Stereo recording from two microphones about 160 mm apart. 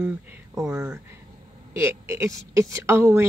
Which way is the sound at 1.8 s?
15° right (ahead or behind).